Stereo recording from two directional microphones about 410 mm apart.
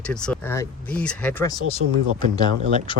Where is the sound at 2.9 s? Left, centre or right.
Centre.